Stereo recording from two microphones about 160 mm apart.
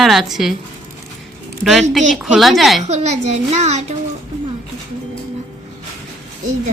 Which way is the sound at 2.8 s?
45° right (ahead or behind).